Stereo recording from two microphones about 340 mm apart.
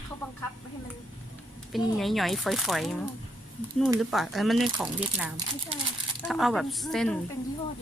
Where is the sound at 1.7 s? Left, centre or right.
Centre.